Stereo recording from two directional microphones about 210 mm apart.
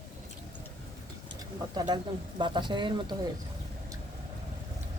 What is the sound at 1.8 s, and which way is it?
Speech, 20° right (ahead or behind).